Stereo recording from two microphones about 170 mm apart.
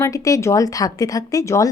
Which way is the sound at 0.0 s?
20° left (ahead or behind).